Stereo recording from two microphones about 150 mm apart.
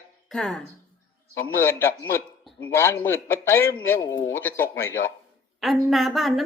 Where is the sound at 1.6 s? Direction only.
15° left (ahead or behind).